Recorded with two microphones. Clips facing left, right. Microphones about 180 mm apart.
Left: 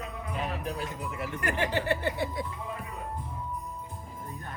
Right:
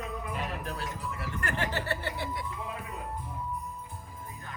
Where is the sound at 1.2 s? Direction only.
15° left (ahead or behind).